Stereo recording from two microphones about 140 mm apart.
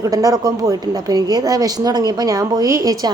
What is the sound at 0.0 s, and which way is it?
A woman's voice, 25° right (ahead or behind).